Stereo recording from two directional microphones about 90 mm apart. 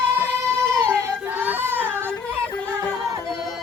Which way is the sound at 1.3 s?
20° right (ahead or behind).